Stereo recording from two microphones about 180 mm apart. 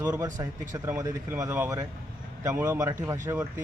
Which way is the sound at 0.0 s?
20° right (ahead or behind).